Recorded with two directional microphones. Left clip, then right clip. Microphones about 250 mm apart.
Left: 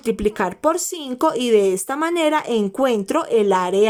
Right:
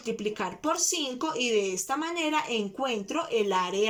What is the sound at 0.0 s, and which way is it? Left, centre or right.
Speech, left.